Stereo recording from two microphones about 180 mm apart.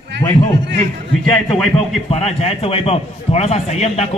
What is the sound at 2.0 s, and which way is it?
A man's voice, 35° left (ahead or behind).